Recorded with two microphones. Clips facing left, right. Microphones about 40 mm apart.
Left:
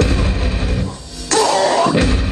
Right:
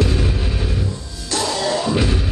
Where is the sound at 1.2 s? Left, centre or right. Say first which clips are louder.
Left 7 dB; left.